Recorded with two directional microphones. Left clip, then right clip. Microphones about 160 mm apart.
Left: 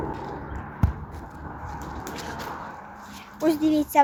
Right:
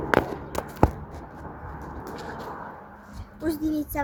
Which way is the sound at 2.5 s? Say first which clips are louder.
Left 2 dB; 5° right (ahead or behind).